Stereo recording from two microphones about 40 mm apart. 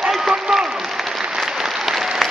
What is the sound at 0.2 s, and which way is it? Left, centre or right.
Applause, centre.